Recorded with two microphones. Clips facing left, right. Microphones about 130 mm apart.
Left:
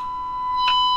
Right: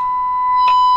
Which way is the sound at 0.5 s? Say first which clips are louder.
Right 8 dB; 55° right (ahead or behind).